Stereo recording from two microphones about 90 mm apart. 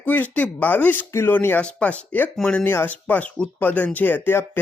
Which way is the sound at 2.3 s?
5° left (ahead or behind).